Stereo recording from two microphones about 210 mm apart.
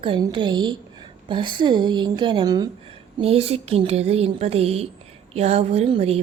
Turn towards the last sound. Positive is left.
turn(degrees=-25)  # may be behind; listen again after turning